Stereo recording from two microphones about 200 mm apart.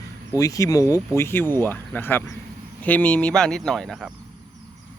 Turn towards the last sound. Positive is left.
turn(degrees=0)  # may be behind; listen again after turning